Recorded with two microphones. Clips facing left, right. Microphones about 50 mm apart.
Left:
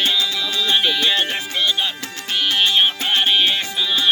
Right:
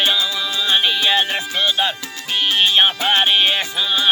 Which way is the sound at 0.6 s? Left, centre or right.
Centre.